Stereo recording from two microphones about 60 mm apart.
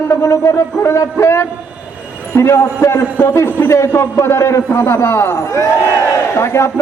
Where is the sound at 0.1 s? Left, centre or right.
Left.